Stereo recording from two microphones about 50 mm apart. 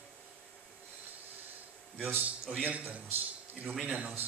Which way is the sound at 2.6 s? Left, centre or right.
Right.